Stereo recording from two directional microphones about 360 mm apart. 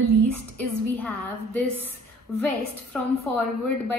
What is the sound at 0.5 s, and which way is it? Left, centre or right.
Speech, centre.